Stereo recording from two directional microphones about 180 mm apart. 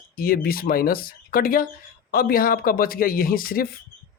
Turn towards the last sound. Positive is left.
turn(degrees=55)  # may be behind; listen again after turning